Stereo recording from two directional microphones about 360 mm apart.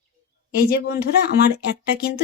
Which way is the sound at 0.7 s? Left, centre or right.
Left.